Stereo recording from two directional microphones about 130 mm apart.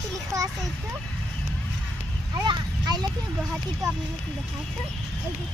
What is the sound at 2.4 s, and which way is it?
Speech, 35° right (ahead or behind).